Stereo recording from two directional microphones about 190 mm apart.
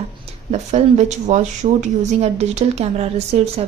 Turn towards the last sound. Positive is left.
turn(degrees=-35)  # may be behind; listen again after turning